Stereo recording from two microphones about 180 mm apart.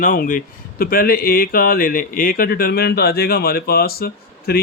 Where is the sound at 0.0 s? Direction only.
50° left (ahead or behind).